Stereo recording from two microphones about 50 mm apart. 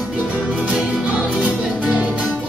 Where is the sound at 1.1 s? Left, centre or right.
Right.